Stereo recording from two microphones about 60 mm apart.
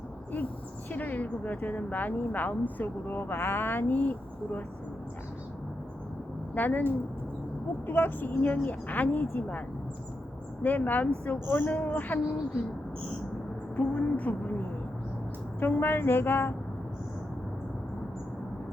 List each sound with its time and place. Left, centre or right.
0.9 s speech: left
6.5 s a woman's voice: left
7.9 s a woman's voice: left
13.7 s a woman's voice: left